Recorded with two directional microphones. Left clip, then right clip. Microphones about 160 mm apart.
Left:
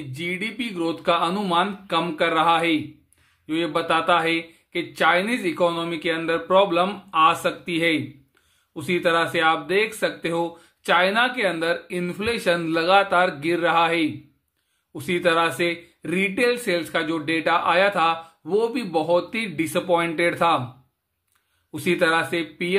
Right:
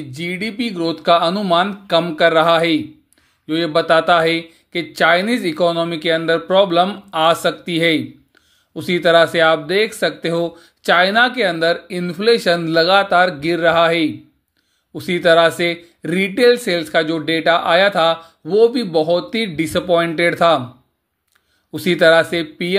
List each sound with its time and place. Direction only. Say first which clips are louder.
0.1 s speech: right 3 dB; 30° right (ahead or behind)
21.7 s speech: right 9 dB; 30° right (ahead or behind)